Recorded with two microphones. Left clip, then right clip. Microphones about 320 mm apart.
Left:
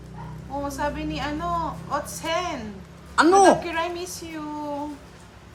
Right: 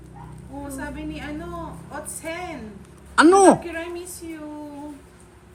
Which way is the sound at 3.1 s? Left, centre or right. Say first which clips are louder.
Right 2 dB; right.